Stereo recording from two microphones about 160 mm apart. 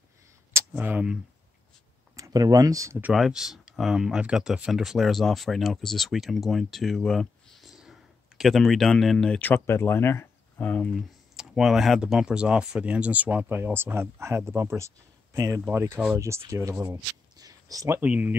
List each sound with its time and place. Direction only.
0.5 s speech: 15° right (ahead or behind)
2.1 s speech: 20° right (ahead or behind)
3.0 s speech: 5° right (ahead or behind)